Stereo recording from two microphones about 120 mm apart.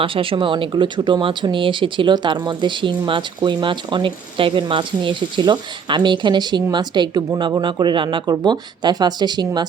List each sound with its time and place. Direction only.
0.0 s speech: 45° right (ahead or behind)